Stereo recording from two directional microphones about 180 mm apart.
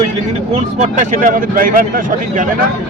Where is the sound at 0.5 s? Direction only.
40° right (ahead or behind).